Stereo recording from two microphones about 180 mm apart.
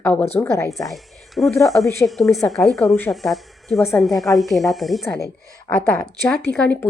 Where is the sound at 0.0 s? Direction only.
10° left (ahead or behind).